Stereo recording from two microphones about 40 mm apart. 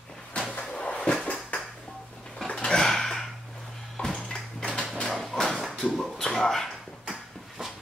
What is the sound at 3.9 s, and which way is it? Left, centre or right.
Dishes, centre.